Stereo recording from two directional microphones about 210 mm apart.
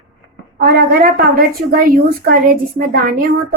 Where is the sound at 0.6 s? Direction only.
50° right (ahead or behind).